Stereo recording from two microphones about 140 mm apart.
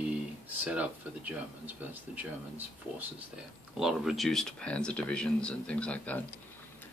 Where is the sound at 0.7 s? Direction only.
10° right (ahead or behind).